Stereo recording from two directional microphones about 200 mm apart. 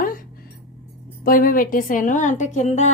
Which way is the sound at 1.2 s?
45° left (ahead or behind).